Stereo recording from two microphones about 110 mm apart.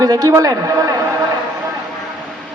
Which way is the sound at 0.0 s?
30° right (ahead or behind).